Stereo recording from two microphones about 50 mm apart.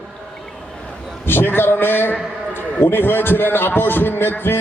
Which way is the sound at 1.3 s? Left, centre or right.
Left.